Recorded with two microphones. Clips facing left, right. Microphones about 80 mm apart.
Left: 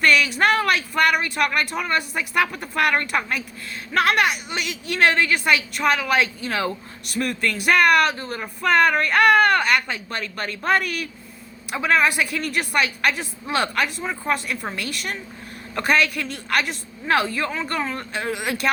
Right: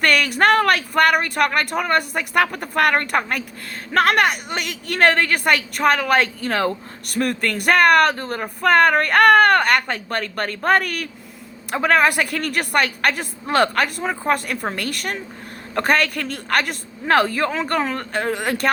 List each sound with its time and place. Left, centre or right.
0.0 s a woman's voice: right
8.1 s a woman's voice: right
17.8 s a woman's voice: right